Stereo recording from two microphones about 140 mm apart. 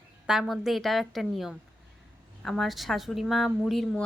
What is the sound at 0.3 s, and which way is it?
Speech, centre (ahead or behind).